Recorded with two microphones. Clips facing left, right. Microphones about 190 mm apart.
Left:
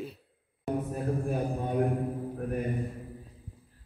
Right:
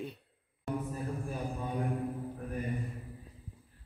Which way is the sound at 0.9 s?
60° left (ahead or behind).